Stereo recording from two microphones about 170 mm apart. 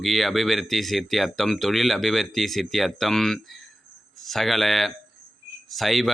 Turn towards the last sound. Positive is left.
turn(degrees=0)  # may be behind; listen again after turning